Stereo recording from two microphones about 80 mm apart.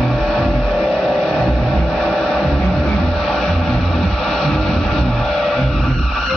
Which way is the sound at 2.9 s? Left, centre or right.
Centre.